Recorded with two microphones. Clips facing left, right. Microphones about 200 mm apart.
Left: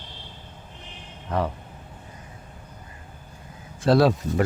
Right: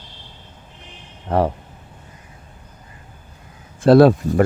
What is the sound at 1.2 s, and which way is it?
Speech, 40° right (ahead or behind).